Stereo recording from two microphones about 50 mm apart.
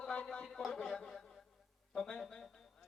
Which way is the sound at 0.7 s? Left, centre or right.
Centre.